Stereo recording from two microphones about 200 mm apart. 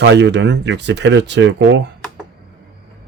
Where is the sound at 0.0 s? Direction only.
60° right (ahead or behind).